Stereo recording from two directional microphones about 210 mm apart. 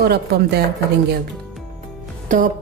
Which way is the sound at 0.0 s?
50° right (ahead or behind).